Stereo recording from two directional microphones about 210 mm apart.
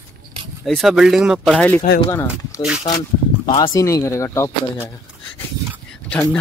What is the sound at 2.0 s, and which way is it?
Speech, 15° left (ahead or behind).